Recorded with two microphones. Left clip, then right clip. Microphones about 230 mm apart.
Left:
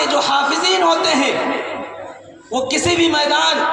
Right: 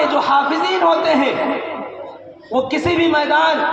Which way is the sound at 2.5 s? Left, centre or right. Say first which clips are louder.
Even; left.